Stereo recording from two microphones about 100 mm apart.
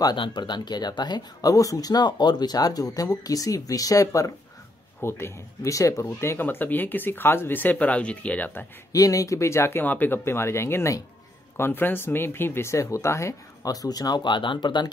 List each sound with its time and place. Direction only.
0.0 s speech: 50° left (ahead or behind); by 6.0 s 30° left (ahead or behind)
6.0 s speech: 20° left (ahead or behind)
8.9 s speech: 35° left (ahead or behind)